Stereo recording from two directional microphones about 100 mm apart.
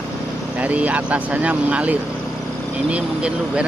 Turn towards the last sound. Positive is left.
turn(degrees=-10)  # may be behind; listen again after turning